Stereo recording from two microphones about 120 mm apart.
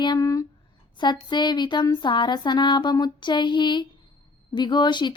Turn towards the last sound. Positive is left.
turn(degrees=40)  # may be behind; listen again after turning